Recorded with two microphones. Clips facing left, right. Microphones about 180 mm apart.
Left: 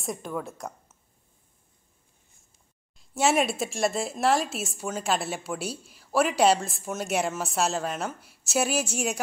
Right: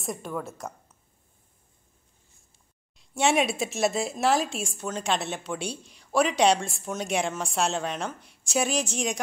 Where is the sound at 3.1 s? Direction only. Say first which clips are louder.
Even; centre (ahead or behind).